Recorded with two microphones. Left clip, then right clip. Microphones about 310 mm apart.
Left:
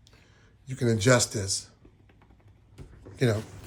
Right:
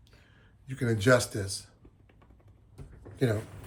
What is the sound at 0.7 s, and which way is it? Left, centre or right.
Speech, centre.